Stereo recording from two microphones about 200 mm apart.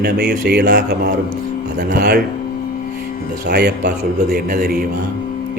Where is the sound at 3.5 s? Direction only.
55° right (ahead or behind).